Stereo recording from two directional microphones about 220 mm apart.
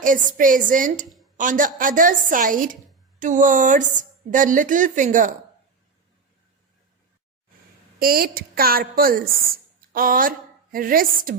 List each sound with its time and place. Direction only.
0.0 s a woman's voice: 35° right (ahead or behind)
7.9 s a woman's voice: 40° right (ahead or behind)